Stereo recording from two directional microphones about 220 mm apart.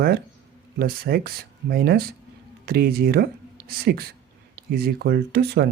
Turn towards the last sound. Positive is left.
turn(degrees=-45)  # may be behind; listen again after turning